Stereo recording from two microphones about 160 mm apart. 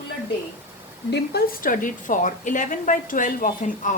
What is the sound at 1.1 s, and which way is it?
A woman's voice, 75° left (ahead or behind).